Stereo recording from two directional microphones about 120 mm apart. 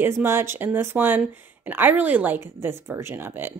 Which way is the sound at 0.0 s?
20° right (ahead or behind).